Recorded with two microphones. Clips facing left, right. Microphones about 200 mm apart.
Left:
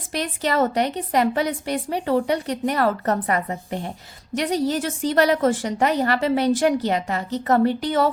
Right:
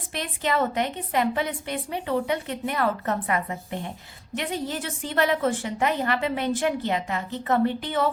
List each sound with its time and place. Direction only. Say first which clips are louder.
0.1 s a woman's voice: left 3 dB; 40° left (ahead or behind)